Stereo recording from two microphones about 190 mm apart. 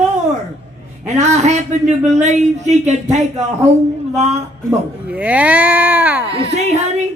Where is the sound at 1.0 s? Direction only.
35° right (ahead or behind).